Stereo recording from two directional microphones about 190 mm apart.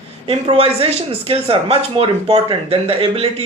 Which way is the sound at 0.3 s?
30° right (ahead or behind).